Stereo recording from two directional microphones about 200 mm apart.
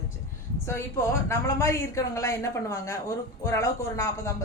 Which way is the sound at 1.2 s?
15° left (ahead or behind).